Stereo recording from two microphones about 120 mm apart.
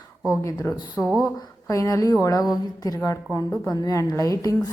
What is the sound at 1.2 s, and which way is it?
Speech, 30° left (ahead or behind).